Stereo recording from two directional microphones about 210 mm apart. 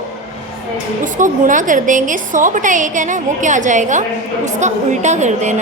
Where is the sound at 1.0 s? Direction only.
40° right (ahead or behind).